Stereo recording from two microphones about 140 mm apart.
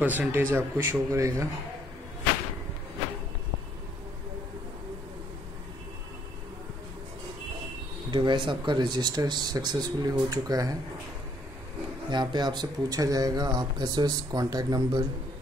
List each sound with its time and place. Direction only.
0.0 s speech: 10° right (ahead or behind)
8.1 s speech: 35° right (ahead or behind)
12.1 s speech: 35° right (ahead or behind)